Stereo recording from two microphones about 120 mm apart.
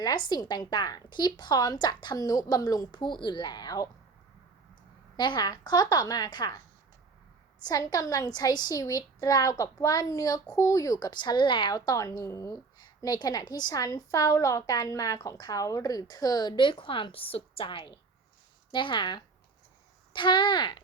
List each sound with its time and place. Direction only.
0.0 s a woman's voice: 35° left (ahead or behind)
5.1 s a woman's voice: 40° left (ahead or behind)
7.6 s a woman's voice: 35° left (ahead or behind)
12.8 s a woman's voice: 35° left (ahead or behind)